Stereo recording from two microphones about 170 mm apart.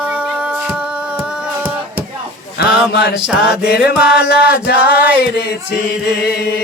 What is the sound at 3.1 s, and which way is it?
Music, 5° right (ahead or behind).